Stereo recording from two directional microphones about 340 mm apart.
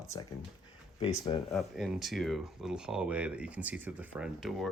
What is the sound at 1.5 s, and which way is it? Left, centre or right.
Speech, centre.